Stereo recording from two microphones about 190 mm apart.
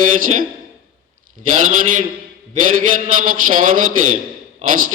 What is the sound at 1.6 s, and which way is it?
Mantra, 45° right (ahead or behind).